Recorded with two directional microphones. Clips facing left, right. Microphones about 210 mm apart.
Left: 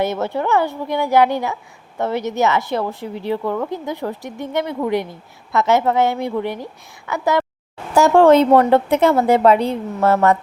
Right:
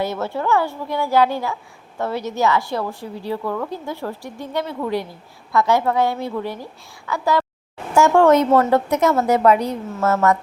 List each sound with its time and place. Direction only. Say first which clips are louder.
0.0 s a woman's voice: left 3 dB; 20° left (ahead or behind)
7.9 s a woman's voice: left 3 dB; 35° left (ahead or behind)